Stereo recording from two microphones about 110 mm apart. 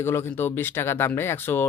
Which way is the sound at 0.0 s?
20° left (ahead or behind).